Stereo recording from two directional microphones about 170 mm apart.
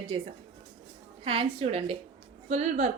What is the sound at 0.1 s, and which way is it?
A woman's voice, 30° right (ahead or behind).